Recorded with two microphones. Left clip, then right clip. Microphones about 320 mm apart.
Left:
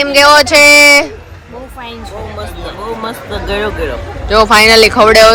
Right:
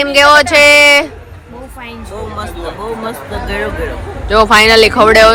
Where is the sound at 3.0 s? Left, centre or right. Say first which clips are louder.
Left 1 dB; centre.